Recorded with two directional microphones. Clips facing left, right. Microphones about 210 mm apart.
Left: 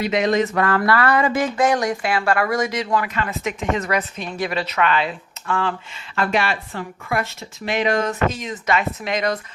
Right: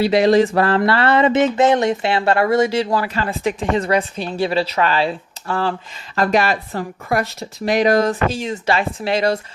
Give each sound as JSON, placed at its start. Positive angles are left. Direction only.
{"t": 0.0, "sound": "a woman's voice", "side_deg": -30}